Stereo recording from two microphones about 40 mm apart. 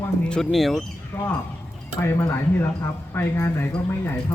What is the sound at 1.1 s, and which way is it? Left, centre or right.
Speech, left.